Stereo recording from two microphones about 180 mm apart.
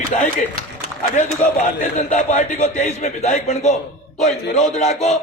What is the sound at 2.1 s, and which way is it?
A man's voice, 40° left (ahead or behind).